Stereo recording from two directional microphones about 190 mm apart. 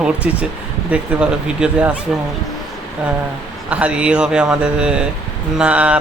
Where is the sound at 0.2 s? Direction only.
5° right (ahead or behind).